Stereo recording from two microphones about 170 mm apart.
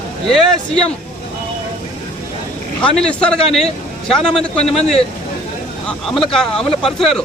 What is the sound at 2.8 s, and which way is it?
A man's voice, 5° left (ahead or behind).